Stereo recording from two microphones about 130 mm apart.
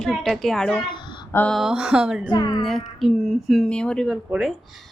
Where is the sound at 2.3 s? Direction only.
30° left (ahead or behind).